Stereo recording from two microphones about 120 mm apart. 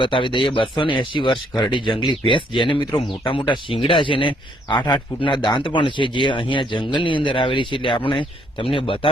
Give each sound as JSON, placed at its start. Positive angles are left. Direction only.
{"t": 0.0, "sound": "speech", "side_deg": 45}